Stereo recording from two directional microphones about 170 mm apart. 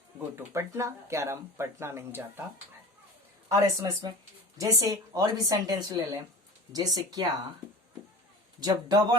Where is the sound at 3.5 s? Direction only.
20° right (ahead or behind).